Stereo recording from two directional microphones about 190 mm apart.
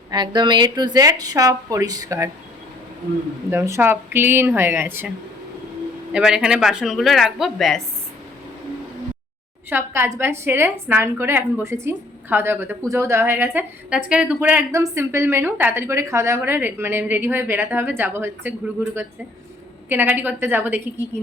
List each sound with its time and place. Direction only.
0.1 s a woman's voice: 25° right (ahead or behind)
3.5 s a woman's voice: 10° right (ahead or behind)
6.1 s speech: 5° right (ahead or behind)
9.6 s a woman's voice: 10° right (ahead or behind)